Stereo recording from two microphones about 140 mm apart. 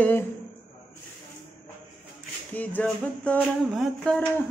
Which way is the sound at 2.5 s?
10° left (ahead or behind).